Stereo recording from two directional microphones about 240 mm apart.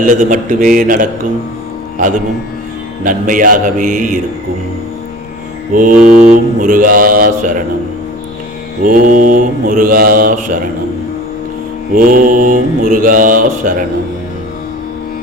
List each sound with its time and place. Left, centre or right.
0.0 s mantra: right
5.7 s mantra: right
8.8 s mantra: right
11.9 s mantra: right